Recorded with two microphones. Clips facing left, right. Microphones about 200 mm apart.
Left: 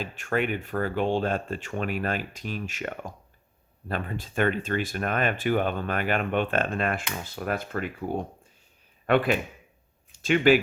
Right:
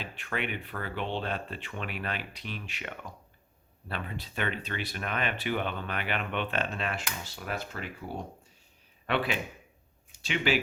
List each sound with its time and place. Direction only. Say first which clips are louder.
0.0 s speech: left 8 dB; 45° left (ahead or behind)